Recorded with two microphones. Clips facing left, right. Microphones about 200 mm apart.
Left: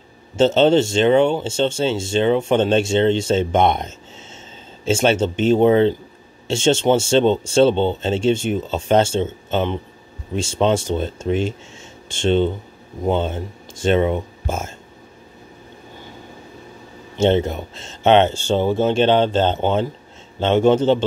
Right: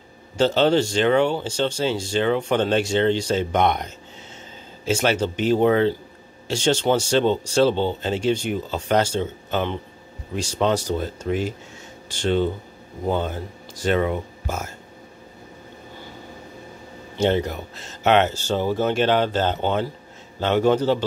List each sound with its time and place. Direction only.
0.4 s speech: 25° left (ahead or behind)
17.2 s speech: 25° left (ahead or behind)